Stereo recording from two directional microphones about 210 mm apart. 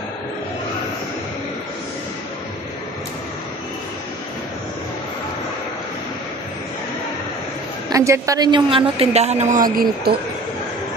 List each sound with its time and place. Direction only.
7.9 s a woman's voice: 15° right (ahead or behind); by 10.2 s 45° right (ahead or behind)